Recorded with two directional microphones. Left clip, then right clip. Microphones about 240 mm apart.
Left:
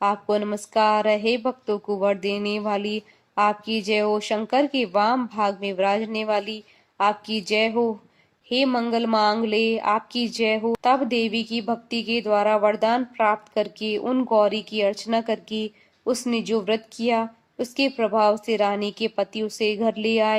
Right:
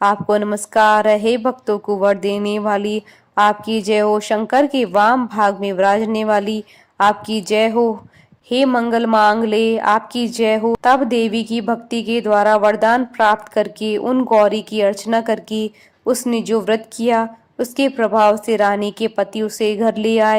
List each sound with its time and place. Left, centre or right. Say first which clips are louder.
0.0 s a woman's voice: right 7 dB; right